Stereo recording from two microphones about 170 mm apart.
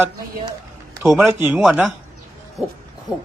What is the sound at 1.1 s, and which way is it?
Speech, 10° right (ahead or behind).